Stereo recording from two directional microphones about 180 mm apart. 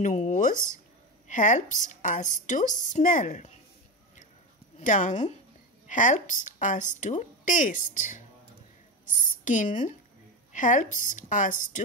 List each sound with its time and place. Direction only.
0.0 s a woman's voice: 40° left (ahead or behind)
4.7 s a woman's voice: 45° left (ahead or behind)